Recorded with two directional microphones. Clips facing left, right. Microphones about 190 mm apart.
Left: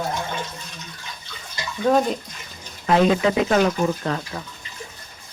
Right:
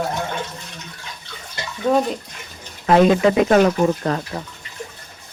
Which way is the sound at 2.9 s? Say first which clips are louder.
Right 4 dB; 55° right (ahead or behind).